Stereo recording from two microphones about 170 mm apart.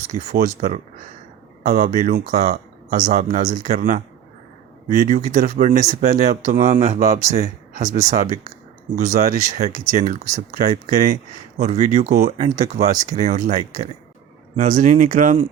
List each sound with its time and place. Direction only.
1.6 s speech: 50° right (ahead or behind)
11.5 s speech: 40° right (ahead or behind)